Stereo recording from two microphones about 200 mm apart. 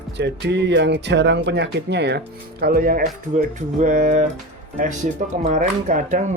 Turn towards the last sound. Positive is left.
turn(degrees=-40)  # may be behind; listen again after turning